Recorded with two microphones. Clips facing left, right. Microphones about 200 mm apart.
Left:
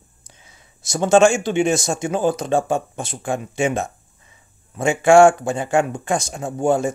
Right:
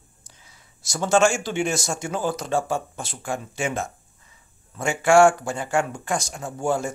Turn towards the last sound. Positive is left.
turn(degrees=20)  # may be behind; listen again after turning